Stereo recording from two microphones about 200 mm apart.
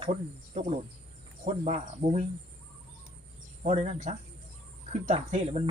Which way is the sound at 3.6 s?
35° right (ahead or behind).